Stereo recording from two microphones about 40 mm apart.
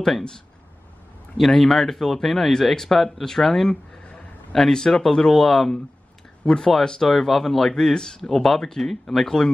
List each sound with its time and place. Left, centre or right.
1.3 s speech: centre
6.4 s speech: centre